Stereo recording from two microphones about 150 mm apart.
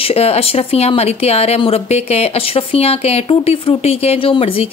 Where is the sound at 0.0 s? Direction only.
45° left (ahead or behind).